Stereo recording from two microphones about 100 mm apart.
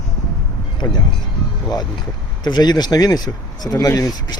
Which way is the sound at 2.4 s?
45° left (ahead or behind).